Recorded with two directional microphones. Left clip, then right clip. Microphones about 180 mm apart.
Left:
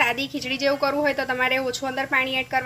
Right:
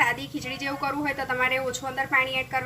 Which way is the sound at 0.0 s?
55° left (ahead or behind).